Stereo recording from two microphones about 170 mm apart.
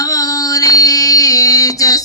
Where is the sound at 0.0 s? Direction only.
20° left (ahead or behind).